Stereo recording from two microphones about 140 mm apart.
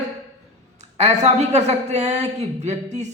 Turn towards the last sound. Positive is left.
turn(degrees=-55)  # may be behind; listen again after turning